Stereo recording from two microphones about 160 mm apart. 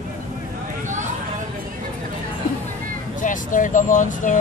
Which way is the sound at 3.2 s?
55° left (ahead or behind).